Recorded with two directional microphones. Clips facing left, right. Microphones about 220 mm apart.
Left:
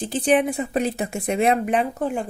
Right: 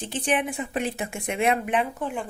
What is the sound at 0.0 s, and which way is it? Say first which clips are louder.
Speech: left 7 dB; 35° left (ahead or behind).